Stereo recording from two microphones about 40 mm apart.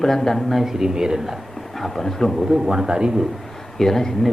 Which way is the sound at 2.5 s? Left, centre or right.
Centre.